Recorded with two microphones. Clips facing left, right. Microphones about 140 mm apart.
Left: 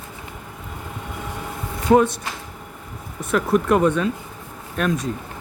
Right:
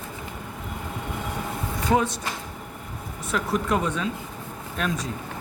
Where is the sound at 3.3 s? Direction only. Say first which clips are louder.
Left 7 dB; 55° left (ahead or behind).